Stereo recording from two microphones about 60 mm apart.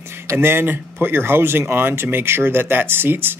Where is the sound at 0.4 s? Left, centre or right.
Right.